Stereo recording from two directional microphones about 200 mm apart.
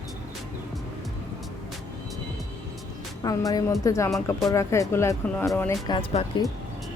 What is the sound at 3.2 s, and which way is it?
Speech, 20° left (ahead or behind).